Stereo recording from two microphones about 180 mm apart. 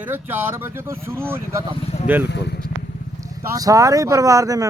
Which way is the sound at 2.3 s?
70° left (ahead or behind).